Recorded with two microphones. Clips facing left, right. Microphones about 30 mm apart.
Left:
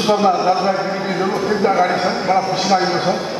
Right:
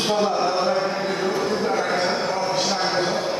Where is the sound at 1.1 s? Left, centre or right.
Centre.